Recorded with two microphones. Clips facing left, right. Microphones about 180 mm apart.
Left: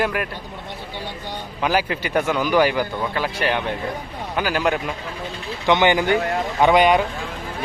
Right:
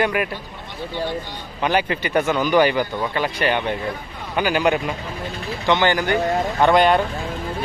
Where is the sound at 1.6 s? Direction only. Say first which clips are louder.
Right 1 dB; 5° left (ahead or behind).